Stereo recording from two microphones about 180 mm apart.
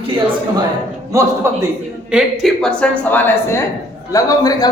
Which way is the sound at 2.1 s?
Centre (ahead or behind).